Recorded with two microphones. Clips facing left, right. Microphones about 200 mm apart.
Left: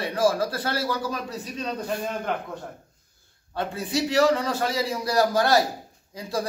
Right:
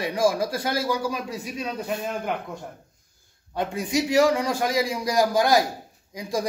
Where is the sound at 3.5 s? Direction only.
15° right (ahead or behind).